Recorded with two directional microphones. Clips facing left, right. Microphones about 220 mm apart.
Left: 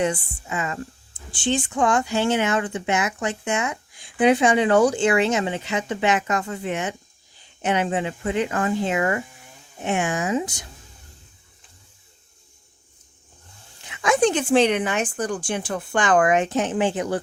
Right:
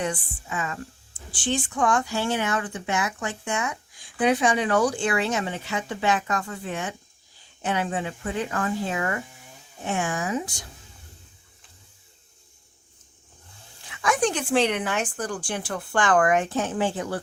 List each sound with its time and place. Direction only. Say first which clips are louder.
0.0 s speech: left 5 dB; 25° left (ahead or behind)
13.8 s speech: left 5 dB; 20° left (ahead or behind)